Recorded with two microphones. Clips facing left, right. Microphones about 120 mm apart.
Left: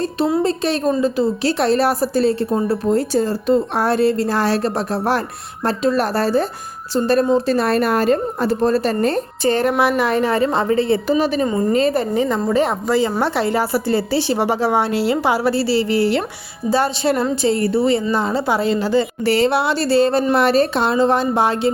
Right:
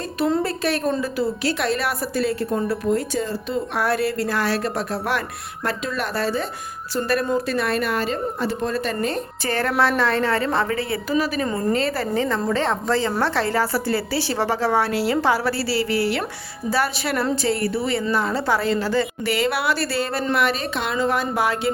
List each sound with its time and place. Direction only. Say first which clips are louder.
0.4 s a woman's voice: left 4 dB; 25° left (ahead or behind); by 3.8 s 40° left (ahead or behind)
3.8 s a woman's voice: left 4 dB; 25° left (ahead or behind)
6.9 s a woman's voice: left 6 dB; 25° left (ahead or behind)
9.4 s a woman's voice: left 5 dB; 20° left (ahead or behind)
19.2 s a woman's voice: left 6 dB; 30° left (ahead or behind)